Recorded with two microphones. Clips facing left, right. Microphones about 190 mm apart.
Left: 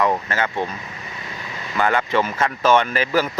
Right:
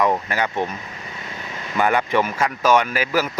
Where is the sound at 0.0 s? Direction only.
15° right (ahead or behind).